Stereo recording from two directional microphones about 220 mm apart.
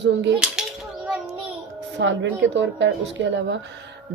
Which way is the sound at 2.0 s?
55° right (ahead or behind).